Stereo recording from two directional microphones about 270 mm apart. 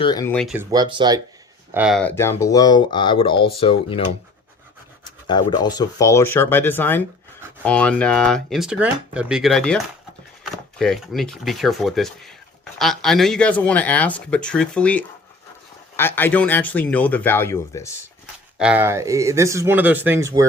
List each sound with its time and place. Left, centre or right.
0.0 s speech: centre
1.7 s speech: centre
18.5 s speech: centre